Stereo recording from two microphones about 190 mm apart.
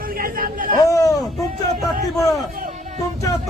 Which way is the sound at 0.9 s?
15° left (ahead or behind).